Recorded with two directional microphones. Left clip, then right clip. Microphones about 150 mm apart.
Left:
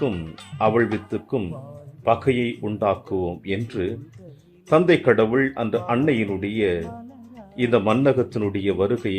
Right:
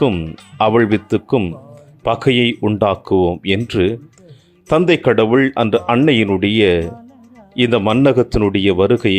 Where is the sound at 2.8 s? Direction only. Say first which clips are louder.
Right 8 dB; 55° right (ahead or behind).